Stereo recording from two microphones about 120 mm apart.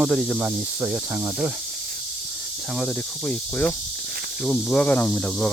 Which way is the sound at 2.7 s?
10° left (ahead or behind).